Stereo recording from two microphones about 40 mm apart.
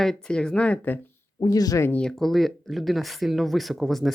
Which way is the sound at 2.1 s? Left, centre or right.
Centre.